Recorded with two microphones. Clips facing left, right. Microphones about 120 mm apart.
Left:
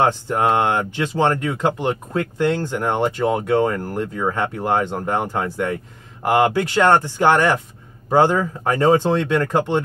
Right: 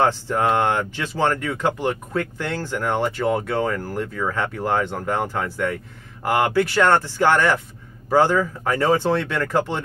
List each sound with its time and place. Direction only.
0.0 s speech: 15° left (ahead or behind)